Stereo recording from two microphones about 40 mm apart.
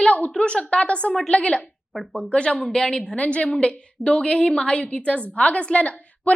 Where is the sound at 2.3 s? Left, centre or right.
Left.